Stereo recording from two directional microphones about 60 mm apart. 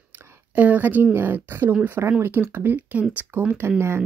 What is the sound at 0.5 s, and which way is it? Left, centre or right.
Speech, right.